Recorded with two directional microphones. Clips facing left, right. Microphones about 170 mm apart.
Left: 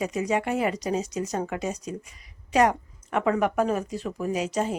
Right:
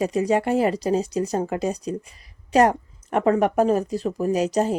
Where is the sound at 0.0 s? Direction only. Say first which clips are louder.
Right 5 dB; 35° right (ahead or behind).